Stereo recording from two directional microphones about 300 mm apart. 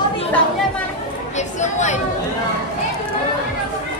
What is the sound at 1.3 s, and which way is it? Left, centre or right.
Speech, left.